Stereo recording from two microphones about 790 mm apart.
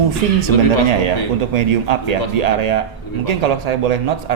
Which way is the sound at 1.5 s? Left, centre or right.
Right.